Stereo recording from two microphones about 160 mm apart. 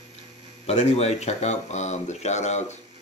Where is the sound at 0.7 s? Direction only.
40° left (ahead or behind).